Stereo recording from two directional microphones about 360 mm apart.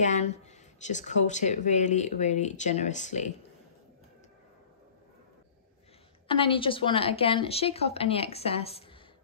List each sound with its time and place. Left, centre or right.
0.0 s speech: centre
6.2 s a woman's voice: centre